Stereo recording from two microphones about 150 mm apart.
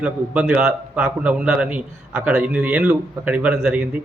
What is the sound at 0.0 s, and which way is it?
A man's voice, 10° right (ahead or behind).